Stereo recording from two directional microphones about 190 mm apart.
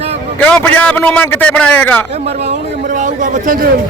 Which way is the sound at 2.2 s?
40° right (ahead or behind).